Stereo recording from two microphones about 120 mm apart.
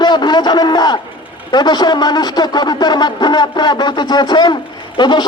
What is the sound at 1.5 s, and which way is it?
A man's voice, 35° left (ahead or behind).